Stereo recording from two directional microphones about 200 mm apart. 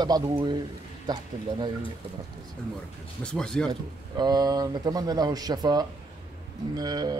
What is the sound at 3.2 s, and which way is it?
Speech, 5° left (ahead or behind).